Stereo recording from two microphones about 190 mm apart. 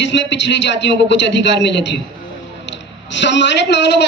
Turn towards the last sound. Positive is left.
turn(degrees=65)  # may be behind; listen again after turning